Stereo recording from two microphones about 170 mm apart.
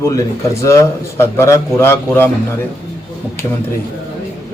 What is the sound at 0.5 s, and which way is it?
A man's voice, 15° left (ahead or behind).